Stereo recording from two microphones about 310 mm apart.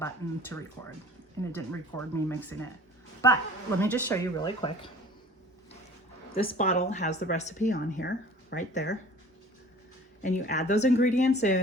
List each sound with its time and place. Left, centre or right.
0.5 s speech: centre
6.3 s speech: left
10.2 s speech: left